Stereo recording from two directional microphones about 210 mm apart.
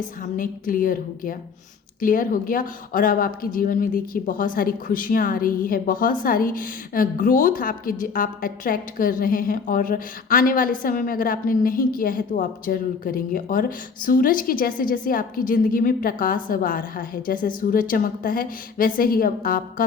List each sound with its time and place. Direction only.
0.3 s a woman's voice: 40° left (ahead or behind)